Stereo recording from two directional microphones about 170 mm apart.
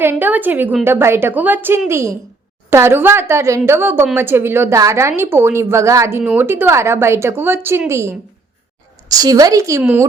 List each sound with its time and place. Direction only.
0.0 s a woman's voice: 10° right (ahead or behind)